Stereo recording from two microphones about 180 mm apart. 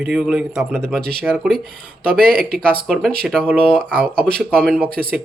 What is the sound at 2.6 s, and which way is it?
Speech, 5° left (ahead or behind).